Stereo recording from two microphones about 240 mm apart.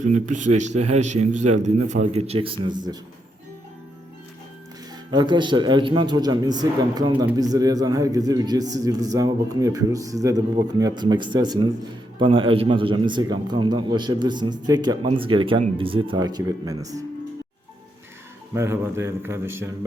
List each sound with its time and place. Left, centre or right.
0.1 s a man's voice: right
5.1 s a man's voice: centre
18.5 s a man's voice: centre